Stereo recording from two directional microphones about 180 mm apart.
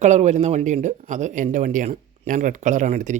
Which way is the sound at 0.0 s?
40° right (ahead or behind).